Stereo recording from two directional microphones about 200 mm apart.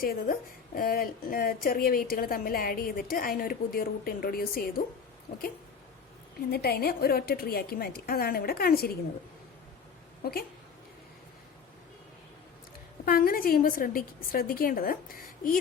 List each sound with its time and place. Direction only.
0.0 s a woman's voice: 45° left (ahead or behind)
6.5 s a woman's voice: 50° left (ahead or behind)
10.2 s a woman's voice: 50° left (ahead or behind)
13.1 s a woman's voice: 45° left (ahead or behind)